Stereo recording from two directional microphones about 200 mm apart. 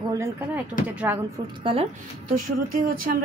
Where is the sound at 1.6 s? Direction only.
30° right (ahead or behind).